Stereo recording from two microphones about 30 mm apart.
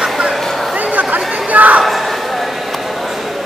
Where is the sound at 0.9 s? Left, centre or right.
Right.